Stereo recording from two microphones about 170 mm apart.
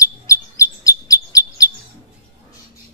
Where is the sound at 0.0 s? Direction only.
20° left (ahead or behind).